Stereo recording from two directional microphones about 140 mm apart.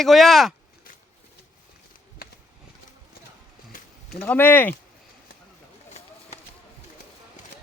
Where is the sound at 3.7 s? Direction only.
90° left.